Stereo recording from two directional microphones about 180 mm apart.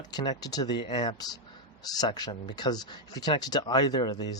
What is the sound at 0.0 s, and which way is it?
Speech, 20° left (ahead or behind).